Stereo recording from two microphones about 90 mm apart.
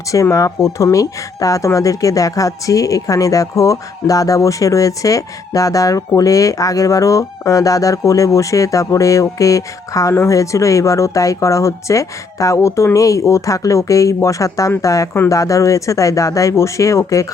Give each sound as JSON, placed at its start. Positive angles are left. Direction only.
{"t": 0.1, "sound": "speech", "side_deg": 35}